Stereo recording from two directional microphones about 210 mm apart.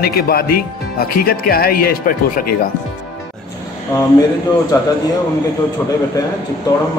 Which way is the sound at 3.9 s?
15° left (ahead or behind).